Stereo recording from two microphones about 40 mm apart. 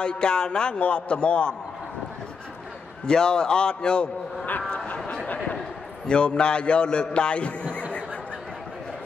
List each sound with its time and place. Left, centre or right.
0.0 s a man's voice: left
3.1 s a man's voice: left
6.0 s a man's voice: left